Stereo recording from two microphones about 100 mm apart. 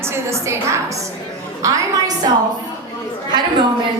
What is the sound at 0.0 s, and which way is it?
A woman's voice, 25° right (ahead or behind).